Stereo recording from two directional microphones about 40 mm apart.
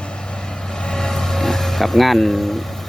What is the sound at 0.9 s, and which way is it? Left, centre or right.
Vehicle, centre.